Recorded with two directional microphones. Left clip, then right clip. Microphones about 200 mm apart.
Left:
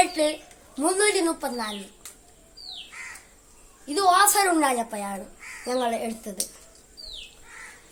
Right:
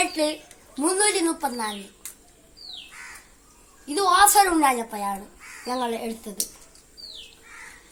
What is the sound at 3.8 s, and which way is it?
A woman's voice, 20° left (ahead or behind).